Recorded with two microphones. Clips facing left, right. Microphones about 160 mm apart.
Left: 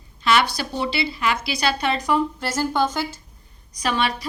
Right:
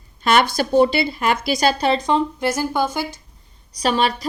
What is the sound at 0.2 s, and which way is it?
A woman's voice, 50° right (ahead or behind).